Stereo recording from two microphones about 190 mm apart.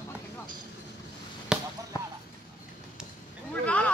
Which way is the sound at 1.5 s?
5° right (ahead or behind).